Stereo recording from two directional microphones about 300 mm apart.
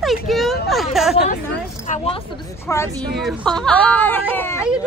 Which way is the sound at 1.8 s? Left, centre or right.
Left.